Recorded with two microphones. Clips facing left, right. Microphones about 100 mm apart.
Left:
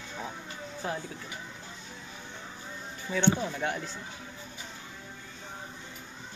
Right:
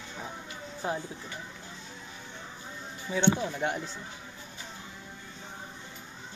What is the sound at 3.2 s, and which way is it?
Speech, 5° right (ahead or behind).